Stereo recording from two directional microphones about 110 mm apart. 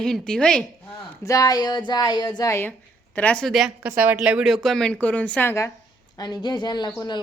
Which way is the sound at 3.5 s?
5° right (ahead or behind).